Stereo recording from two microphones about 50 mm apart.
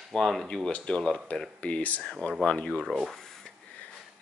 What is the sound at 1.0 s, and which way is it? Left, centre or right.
Speech, centre.